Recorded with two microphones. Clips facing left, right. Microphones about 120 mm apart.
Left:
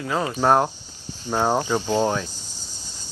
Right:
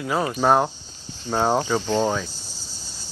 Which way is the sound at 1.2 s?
15° left (ahead or behind).